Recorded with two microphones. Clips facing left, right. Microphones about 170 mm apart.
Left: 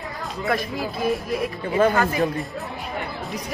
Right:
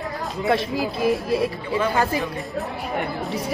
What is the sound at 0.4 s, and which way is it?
Speech, 20° right (ahead or behind).